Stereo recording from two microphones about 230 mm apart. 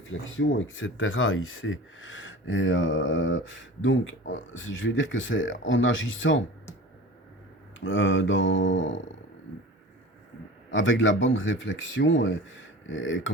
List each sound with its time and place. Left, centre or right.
0.0 s speech: left
7.9 s speech: left
10.7 s speech: left